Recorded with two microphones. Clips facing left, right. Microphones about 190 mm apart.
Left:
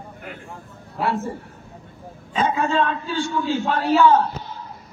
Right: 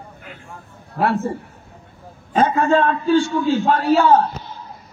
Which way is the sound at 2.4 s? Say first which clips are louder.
Right 3 dB; 55° right (ahead or behind).